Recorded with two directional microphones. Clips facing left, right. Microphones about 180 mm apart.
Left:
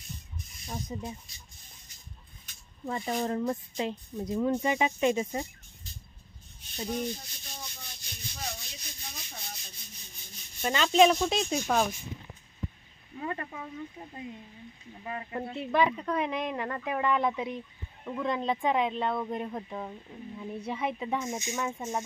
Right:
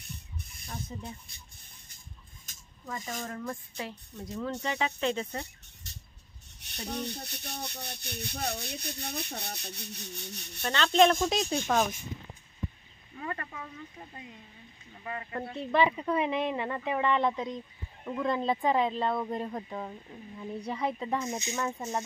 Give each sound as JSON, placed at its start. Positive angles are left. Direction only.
{"t": 0.0, "sound": "a sound", "side_deg": -60}
{"t": 0.7, "sound": "speech", "side_deg": 20}
{"t": 2.5, "sound": "a sound", "side_deg": -45}
{"t": 3.3, "sound": "speech", "side_deg": 25}
{"t": 5.9, "sound": "vehicle", "side_deg": -75}
{"t": 6.6, "sound": "speech", "side_deg": -70}
{"t": 10.6, "sound": "speech", "side_deg": 10}
{"t": 13.2, "sound": "speech", "side_deg": 15}
{"t": 15.0, "sound": "speech", "side_deg": 20}
{"t": 15.5, "sound": "speech", "side_deg": 5}
{"t": 15.8, "sound": "speech", "side_deg": -5}